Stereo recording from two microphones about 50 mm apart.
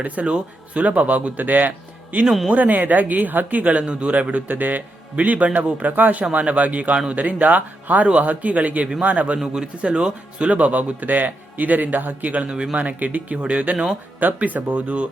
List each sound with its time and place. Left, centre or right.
0.0 s speech: right